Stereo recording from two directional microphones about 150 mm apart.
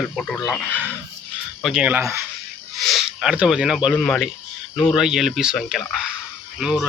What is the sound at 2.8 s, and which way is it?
Speech, centre (ahead or behind).